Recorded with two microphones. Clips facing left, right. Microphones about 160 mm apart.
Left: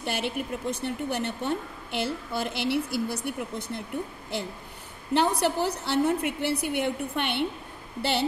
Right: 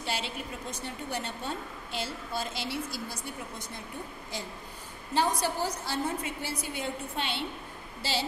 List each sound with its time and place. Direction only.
0.0 s a woman's voice: 55° left (ahead or behind)